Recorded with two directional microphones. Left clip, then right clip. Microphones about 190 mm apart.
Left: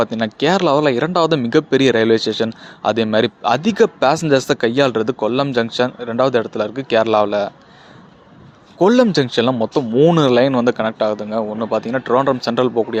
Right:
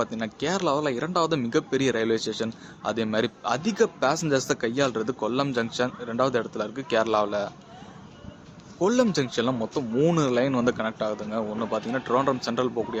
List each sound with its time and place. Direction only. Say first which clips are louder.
0.0 s speech: left 11 dB; 40° left (ahead or behind)
8.8 s speech: left 10 dB; 40° left (ahead or behind)